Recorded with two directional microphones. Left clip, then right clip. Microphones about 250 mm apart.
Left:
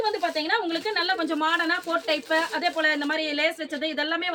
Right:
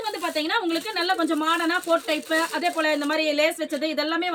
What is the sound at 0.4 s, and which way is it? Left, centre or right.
A woman's voice, centre.